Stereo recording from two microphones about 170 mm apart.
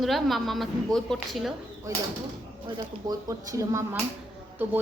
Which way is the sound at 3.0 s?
20° right (ahead or behind).